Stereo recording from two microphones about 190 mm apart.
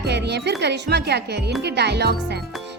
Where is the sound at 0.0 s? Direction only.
60° right (ahead or behind).